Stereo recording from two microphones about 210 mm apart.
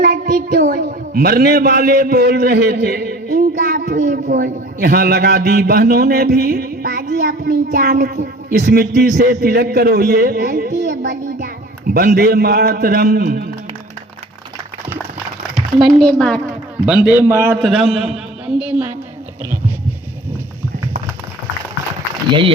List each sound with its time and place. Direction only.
0.0 s a woman's voice: 40° right (ahead or behind)
15.5 s a man's voice: centre (ahead or behind)
22.3 s speech: 25° right (ahead or behind)